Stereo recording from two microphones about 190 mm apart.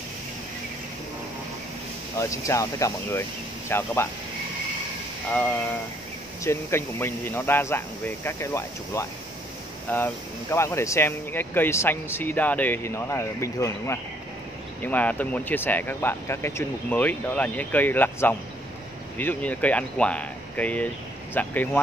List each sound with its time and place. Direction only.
2.1 s speech: 15° left (ahead or behind)
6.4 s speech: 15° left (ahead or behind)